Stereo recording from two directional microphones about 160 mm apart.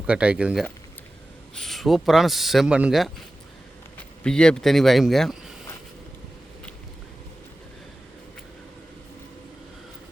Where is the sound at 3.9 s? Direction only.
5° left (ahead or behind).